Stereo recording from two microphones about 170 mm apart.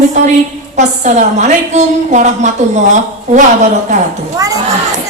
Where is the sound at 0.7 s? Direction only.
45° right (ahead or behind).